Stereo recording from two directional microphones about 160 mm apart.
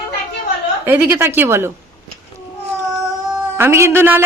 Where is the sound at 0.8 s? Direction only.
10° right (ahead or behind).